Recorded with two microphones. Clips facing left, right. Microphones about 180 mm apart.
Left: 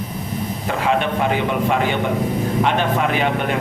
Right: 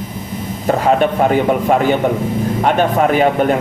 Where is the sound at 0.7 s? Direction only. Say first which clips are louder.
Right 7 dB; 45° right (ahead or behind).